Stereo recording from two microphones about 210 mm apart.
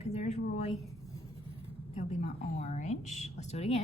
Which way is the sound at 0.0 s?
30° left (ahead or behind).